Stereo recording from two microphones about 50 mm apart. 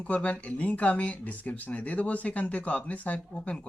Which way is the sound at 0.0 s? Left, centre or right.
Left.